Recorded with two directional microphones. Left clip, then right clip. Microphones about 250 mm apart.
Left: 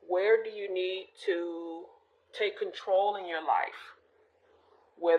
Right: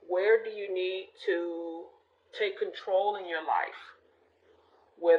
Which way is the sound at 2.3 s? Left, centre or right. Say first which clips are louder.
Right 1 dB; left.